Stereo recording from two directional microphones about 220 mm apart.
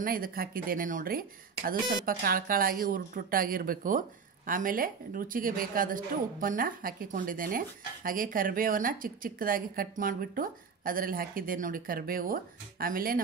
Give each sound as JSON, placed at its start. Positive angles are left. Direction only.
{"t": 0.0, "sound": "a woman's voice", "side_deg": -40}